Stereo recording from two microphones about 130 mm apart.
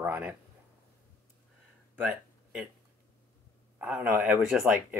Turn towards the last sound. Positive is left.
turn(degrees=-5)  # may be behind; listen again after turning